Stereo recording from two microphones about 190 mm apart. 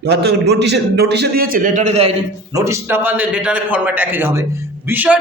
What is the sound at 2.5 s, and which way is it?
A man's voice, 15° right (ahead or behind).